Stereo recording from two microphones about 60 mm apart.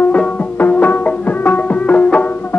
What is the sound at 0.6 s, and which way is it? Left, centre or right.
Music, left.